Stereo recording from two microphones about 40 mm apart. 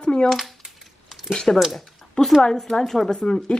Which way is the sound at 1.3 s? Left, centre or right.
Centre.